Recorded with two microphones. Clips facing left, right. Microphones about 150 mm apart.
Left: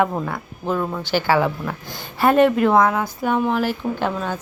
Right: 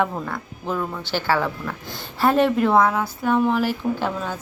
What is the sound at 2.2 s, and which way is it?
A woman's voice, centre (ahead or behind).